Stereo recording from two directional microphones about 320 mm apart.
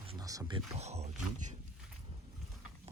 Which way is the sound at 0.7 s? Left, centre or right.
Centre.